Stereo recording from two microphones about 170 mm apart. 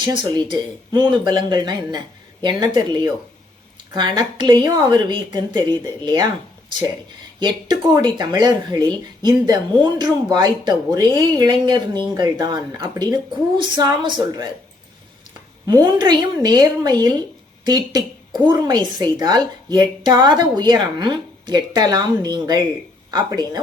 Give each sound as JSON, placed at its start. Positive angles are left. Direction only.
{"t": 0.0, "sound": "a woman's voice", "side_deg": -25}
{"t": 7.3, "sound": "a woman's voice", "side_deg": -25}
{"t": 15.6, "sound": "a woman's voice", "side_deg": -25}